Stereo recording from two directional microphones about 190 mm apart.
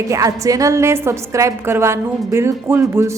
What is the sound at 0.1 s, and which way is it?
A woman's voice, 15° right (ahead or behind).